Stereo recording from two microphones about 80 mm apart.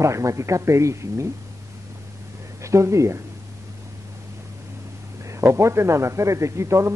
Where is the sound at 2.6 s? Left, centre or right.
Right.